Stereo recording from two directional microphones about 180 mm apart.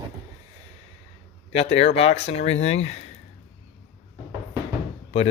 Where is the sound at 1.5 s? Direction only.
35° left (ahead or behind).